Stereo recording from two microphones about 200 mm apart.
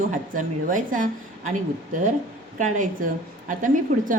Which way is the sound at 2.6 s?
40° right (ahead or behind).